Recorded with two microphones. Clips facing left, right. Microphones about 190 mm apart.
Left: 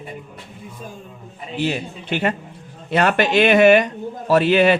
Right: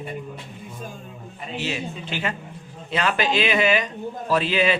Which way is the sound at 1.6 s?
55° left (ahead or behind).